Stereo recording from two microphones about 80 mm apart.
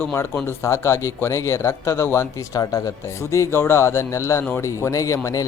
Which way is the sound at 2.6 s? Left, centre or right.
Left.